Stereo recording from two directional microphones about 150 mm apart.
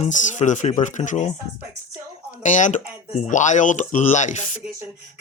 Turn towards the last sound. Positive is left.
turn(degrees=55)  # may be behind; listen again after turning